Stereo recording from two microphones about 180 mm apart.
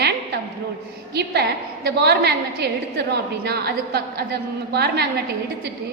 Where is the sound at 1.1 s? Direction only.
65° right (ahead or behind).